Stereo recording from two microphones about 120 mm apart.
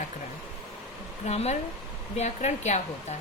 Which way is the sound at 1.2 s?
70° left (ahead or behind).